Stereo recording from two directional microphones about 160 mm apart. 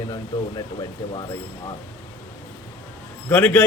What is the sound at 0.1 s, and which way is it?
Speech, 25° left (ahead or behind).